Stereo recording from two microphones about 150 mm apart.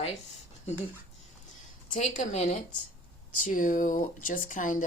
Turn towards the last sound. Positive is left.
turn(degrees=60)  # may be behind; listen again after turning